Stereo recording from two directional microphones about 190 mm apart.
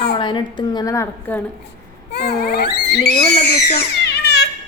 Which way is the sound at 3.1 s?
35° left (ahead or behind).